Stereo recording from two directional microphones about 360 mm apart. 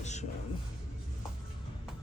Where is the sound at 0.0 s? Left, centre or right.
Centre.